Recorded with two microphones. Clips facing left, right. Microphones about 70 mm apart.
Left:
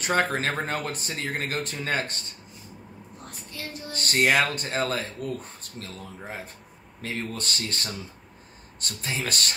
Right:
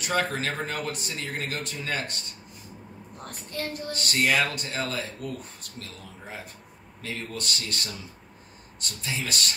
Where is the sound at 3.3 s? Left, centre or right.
Right.